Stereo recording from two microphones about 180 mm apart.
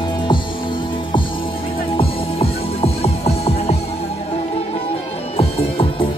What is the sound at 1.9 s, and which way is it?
Music, 30° left (ahead or behind).